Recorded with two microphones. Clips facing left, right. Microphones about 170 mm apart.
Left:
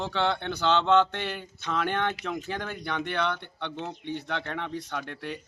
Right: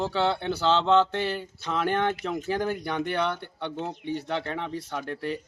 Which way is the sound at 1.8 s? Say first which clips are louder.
Right 6 dB; 40° right (ahead or behind).